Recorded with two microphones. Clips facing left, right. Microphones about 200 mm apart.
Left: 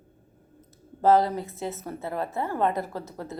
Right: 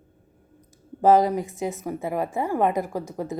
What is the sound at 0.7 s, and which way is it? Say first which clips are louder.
Speech: right 3 dB; 15° right (ahead or behind).